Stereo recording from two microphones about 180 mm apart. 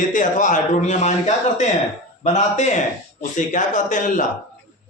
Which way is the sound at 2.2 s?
40° left (ahead or behind).